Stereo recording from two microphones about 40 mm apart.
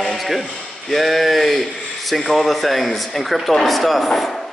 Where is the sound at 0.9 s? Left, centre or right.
Centre.